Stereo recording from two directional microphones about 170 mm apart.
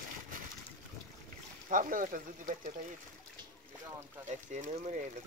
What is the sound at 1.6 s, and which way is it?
Speech, 50° right (ahead or behind).